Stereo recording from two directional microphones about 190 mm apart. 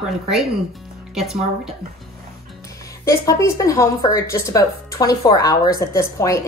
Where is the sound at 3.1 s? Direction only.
15° left (ahead or behind).